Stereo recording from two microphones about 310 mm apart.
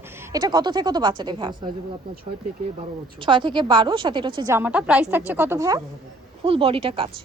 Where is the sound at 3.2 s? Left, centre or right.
Centre.